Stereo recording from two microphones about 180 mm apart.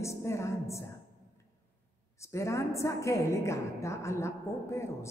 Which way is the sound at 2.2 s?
15° left (ahead or behind).